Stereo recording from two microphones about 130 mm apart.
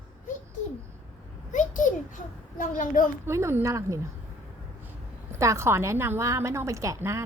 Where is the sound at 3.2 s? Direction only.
20° right (ahead or behind).